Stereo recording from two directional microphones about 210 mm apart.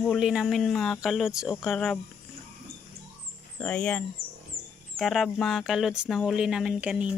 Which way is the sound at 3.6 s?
5° left (ahead or behind).